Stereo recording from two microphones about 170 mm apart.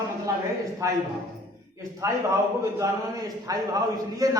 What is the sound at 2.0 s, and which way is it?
Speech, 20° right (ahead or behind).